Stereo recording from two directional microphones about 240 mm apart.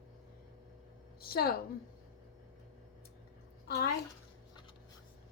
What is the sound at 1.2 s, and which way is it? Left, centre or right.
Speech, left.